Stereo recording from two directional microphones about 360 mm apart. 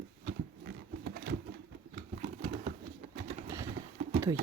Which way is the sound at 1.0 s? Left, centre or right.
Right.